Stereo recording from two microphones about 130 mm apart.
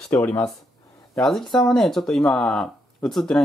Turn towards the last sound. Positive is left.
turn(degrees=5)  # may be behind; listen again after turning